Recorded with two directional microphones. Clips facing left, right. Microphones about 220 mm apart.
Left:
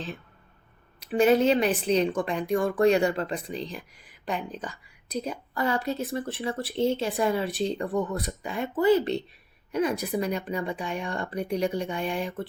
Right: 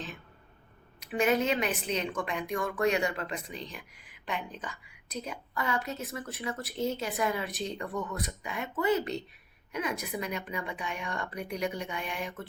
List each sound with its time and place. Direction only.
0.9 s speech: 30° left (ahead or behind)